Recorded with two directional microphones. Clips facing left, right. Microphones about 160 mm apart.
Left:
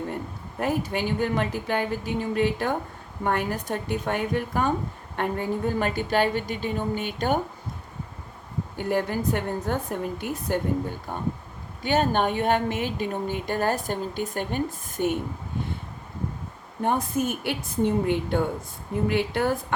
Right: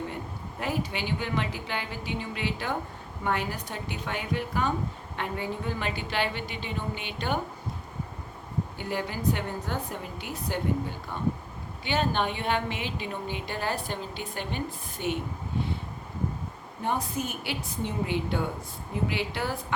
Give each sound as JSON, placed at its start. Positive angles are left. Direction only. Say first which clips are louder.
{"t": 0.6, "sound": "a woman's voice", "louder": "left 5 dB", "side_deg": 50}
{"t": 8.8, "sound": "a woman's voice", "louder": "left 7 dB", "side_deg": 50}
{"t": 16.8, "sound": "a woman's voice", "louder": "left 5 dB", "side_deg": 50}